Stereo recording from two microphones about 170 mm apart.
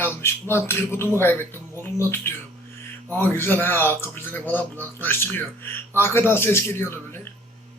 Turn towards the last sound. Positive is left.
turn(degrees=15)  # may be behind; listen again after turning